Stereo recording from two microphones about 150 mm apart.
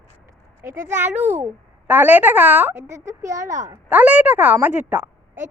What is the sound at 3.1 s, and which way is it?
Speech, 20° right (ahead or behind).